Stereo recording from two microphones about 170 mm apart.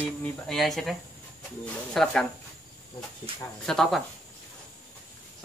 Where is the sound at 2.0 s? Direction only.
Centre (ahead or behind).